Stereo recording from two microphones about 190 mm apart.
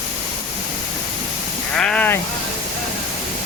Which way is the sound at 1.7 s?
5° left (ahead or behind).